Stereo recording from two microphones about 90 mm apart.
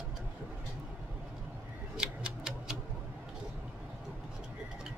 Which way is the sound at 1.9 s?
10° right (ahead or behind).